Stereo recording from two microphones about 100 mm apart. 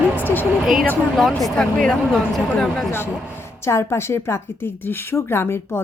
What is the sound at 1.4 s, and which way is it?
Speech, 5° left (ahead or behind).